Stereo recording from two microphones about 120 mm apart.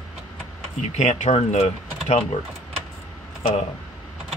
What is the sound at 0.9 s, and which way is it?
Speech, 75° left (ahead or behind).